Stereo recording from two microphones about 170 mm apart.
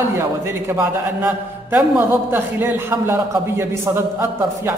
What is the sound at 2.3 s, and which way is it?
A man's voice, 10° right (ahead or behind).